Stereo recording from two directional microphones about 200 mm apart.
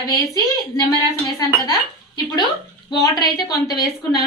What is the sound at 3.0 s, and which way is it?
Speech, 20° left (ahead or behind).